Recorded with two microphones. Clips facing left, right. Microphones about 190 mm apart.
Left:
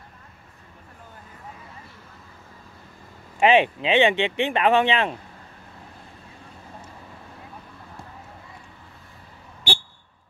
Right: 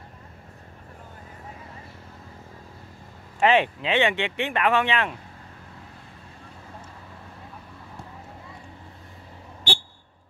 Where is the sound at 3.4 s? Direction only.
20° left (ahead or behind).